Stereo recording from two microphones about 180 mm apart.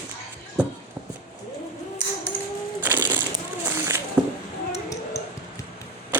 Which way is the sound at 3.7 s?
15° right (ahead or behind).